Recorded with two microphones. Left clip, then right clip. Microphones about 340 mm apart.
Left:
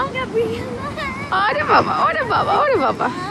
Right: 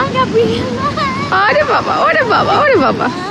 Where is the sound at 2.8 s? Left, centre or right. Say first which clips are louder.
Right 5 dB; right.